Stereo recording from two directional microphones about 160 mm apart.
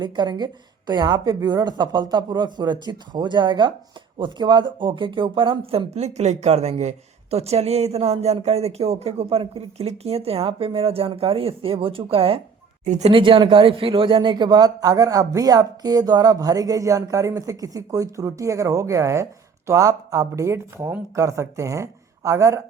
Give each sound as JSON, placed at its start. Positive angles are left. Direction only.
{"t": 0.0, "sound": "speech", "side_deg": -25}
{"t": 12.8, "sound": "speech", "side_deg": -45}